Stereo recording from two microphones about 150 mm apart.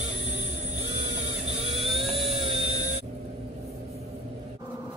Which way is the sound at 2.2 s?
40° right (ahead or behind).